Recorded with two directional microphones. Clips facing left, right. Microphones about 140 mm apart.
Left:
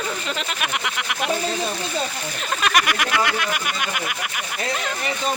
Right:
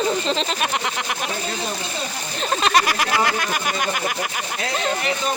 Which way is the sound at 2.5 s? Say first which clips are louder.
Right 2 dB; 30° right (ahead or behind).